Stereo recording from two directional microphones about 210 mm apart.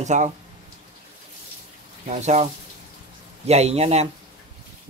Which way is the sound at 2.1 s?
35° right (ahead or behind).